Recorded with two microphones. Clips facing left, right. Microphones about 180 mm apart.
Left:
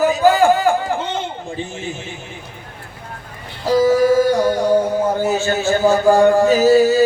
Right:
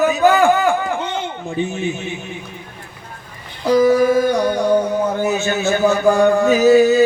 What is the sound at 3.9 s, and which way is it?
Speech, 40° left (ahead or behind).